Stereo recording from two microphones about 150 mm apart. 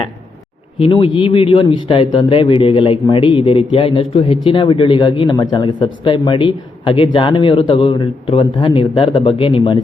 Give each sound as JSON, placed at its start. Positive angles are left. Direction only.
{"t": 0.8, "sound": "speech", "side_deg": 35}